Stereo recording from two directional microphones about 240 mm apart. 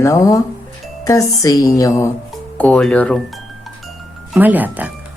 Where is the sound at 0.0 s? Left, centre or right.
Centre.